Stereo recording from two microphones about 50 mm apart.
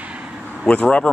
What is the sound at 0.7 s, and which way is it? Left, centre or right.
Speech, left.